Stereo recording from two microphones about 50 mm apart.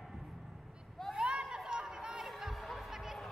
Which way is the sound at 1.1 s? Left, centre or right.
Centre.